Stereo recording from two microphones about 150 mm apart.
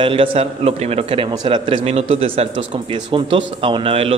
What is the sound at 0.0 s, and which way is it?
Speech, 35° right (ahead or behind).